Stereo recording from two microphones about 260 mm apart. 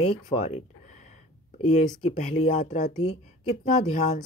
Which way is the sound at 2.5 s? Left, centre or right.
Left.